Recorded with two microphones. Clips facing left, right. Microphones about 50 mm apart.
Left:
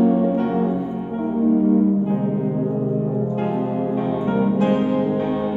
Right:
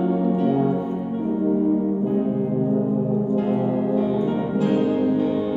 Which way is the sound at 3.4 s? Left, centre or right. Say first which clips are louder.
Right 1 dB; left.